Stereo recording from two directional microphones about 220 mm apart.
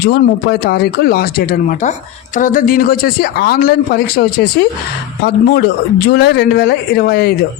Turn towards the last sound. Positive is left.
turn(degrees=45)  # may be behind; listen again after turning